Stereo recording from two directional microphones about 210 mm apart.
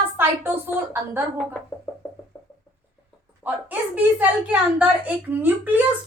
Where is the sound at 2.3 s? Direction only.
5° left (ahead or behind).